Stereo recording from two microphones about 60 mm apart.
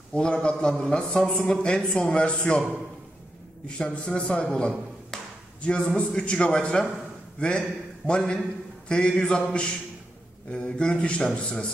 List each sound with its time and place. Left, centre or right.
0.1 s a man's voice: centre
3.6 s a man's voice: centre
10.5 s a man's voice: centre